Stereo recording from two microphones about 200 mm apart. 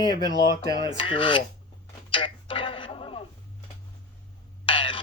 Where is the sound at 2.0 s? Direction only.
25° left (ahead or behind).